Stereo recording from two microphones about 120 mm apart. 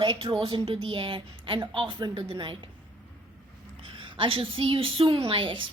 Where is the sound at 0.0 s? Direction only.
45° right (ahead or behind).